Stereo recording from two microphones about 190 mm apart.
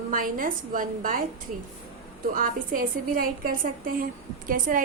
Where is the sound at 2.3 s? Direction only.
45° right (ahead or behind).